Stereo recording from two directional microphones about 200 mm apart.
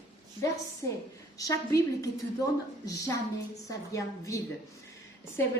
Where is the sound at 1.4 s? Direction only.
15° left (ahead or behind).